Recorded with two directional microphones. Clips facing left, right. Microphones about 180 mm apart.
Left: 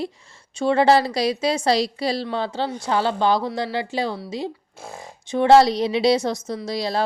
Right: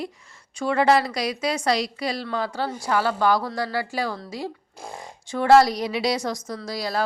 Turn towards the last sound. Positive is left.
turn(degrees=25)  # may be behind; listen again after turning